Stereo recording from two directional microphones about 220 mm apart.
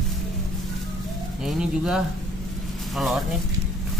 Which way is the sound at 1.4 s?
Centre (ahead or behind).